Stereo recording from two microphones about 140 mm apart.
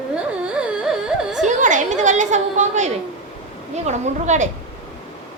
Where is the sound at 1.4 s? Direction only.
65° right (ahead or behind).